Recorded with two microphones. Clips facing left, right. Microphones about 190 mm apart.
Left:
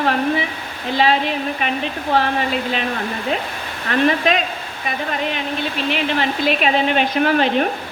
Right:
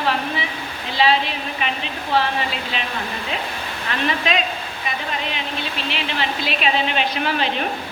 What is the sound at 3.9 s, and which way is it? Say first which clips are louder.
Speech: left 6 dB; 45° left (ahead or behind).